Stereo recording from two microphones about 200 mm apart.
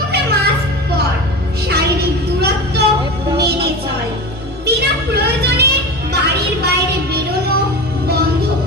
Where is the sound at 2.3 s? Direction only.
55° right (ahead or behind).